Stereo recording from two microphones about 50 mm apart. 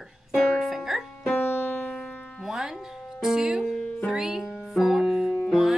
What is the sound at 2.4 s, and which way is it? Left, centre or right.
A woman's voice, centre.